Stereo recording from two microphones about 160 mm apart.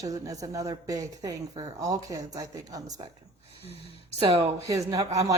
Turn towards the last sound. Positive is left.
turn(degrees=-20)  # may be behind; listen again after turning